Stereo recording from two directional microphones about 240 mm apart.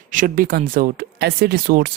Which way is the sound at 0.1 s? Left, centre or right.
Right.